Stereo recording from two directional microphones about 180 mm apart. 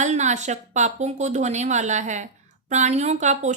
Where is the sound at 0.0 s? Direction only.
40° right (ahead or behind).